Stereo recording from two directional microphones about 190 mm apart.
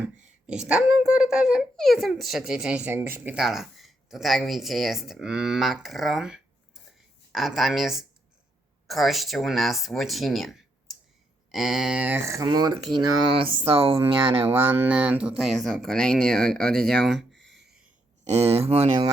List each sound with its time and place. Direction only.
0.0 s a child's voice: 5° right (ahead or behind); by 14.4 s 30° right (ahead or behind)
14.4 s a child's voice: 10° right (ahead or behind)
18.3 s speech: 35° right (ahead or behind)